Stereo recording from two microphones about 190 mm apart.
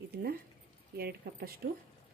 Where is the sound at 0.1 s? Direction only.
55° right (ahead or behind).